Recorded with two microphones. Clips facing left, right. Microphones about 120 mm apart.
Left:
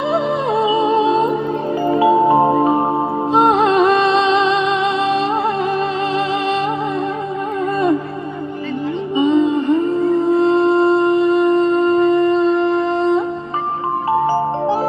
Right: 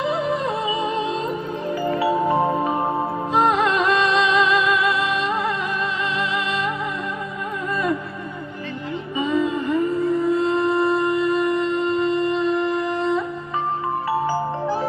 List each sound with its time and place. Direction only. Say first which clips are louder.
0.1 s music: left 5 dB; 30° left (ahead or behind)
9.1 s humming: left 7 dB; 25° left (ahead or behind)
14.3 s music: left 6 dB; 25° left (ahead or behind)